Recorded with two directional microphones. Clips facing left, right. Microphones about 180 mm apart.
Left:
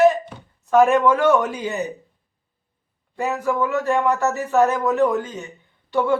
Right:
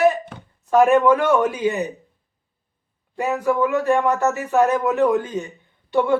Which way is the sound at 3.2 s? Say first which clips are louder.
Right 2 dB; 15° right (ahead or behind).